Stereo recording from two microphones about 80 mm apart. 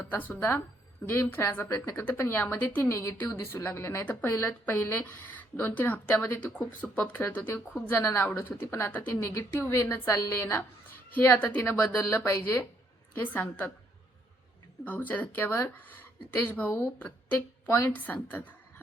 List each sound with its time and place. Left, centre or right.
0.1 s a woman's voice: left
8.6 s a woman's voice: left
11.1 s speech: left
12.2 s speech: left
13.3 s speech: centre
14.8 s speech: left